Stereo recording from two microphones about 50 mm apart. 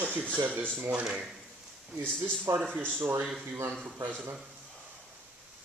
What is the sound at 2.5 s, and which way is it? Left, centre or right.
Speech, right.